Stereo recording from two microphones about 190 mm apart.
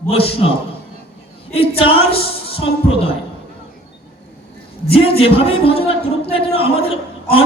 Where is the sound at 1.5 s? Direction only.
30° left (ahead or behind).